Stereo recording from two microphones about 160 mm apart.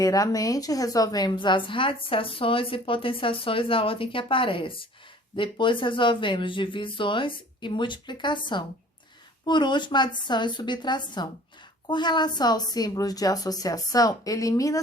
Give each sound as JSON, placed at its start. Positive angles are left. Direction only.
{"t": 0.0, "sound": "a woman's voice", "side_deg": 20}